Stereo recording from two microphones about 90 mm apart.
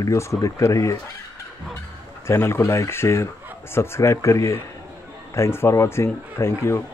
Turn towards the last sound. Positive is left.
turn(degrees=30)  # may be behind; listen again after turning